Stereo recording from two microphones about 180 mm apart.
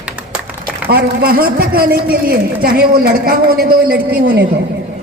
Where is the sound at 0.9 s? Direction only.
60° right (ahead or behind).